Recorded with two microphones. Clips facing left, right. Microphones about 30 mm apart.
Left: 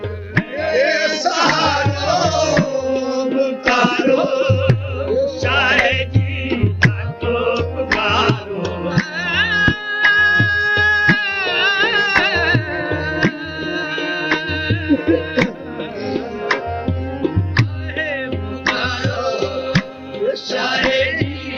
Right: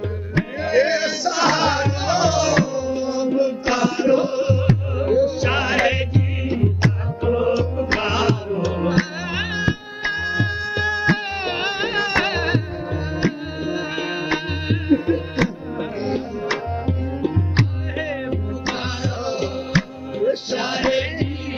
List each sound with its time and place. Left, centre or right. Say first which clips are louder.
0.3 s music: left 3 dB; left
5.0 s music: even; centre
5.6 s music: left 6 dB; left
6.5 s music: left 4 dB; left
7.2 s music: left 1 dB; left
7.5 s music: left 2 dB; left
9.2 s music: left 8 dB; left
9.9 s music: left 13 dB; left
12.7 s music: left 6 dB; left
13.0 s tabla: left 5 dB; left
13.7 s music: left 6 dB; centre; by 15.5 s left
16.1 s tabla: left 6 dB; left
18.3 s music: left 5 dB; left